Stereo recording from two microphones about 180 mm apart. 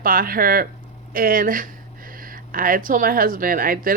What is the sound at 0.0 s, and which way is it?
Speech, 55° right (ahead or behind).